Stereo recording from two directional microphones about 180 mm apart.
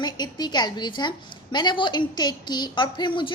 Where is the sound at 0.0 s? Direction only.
25° left (ahead or behind).